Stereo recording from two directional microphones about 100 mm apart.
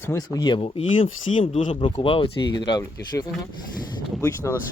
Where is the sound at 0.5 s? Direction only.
65° left (ahead or behind).